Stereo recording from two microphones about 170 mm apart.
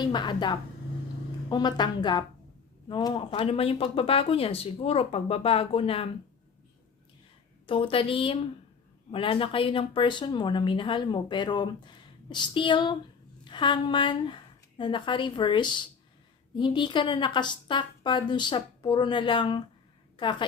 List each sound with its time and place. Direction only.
0.0 s speech: 25° left (ahead or behind)
7.7 s a woman's voice: 30° left (ahead or behind)